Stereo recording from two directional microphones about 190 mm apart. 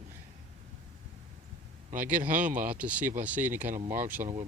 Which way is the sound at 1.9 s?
45° right (ahead or behind).